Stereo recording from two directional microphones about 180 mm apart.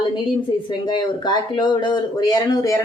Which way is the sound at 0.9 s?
25° left (ahead or behind).